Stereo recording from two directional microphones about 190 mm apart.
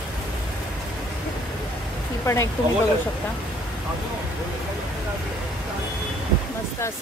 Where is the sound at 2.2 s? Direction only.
15° left (ahead or behind).